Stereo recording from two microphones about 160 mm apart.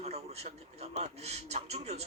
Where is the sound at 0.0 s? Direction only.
40° right (ahead or behind).